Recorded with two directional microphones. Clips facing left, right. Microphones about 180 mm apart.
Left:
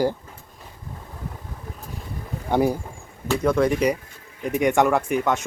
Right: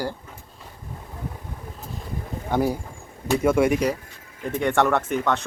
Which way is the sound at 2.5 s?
10° left (ahead or behind).